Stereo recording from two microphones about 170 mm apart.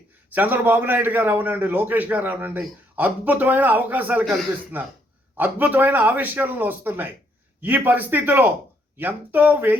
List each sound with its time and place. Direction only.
0.3 s a man's voice: 10° right (ahead or behind)